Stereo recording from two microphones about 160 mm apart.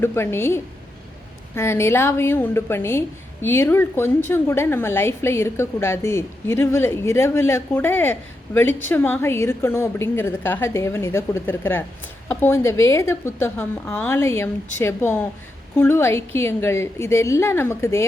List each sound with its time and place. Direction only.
0.0 s a woman's voice: 15° left (ahead or behind)